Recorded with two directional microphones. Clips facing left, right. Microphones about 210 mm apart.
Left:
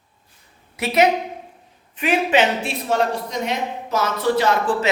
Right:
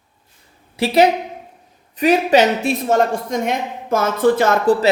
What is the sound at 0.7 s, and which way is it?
A woman's voice, 30° right (ahead or behind).